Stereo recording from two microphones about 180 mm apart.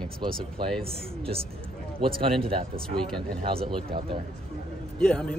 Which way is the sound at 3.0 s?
5° left (ahead or behind).